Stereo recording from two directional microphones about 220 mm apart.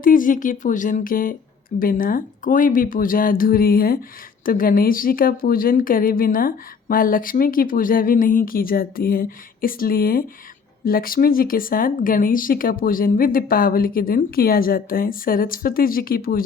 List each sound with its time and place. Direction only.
0.0 s a woman's voice: 40° left (ahead or behind)